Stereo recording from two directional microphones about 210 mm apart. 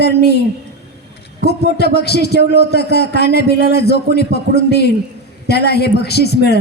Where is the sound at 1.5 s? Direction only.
50° left (ahead or behind).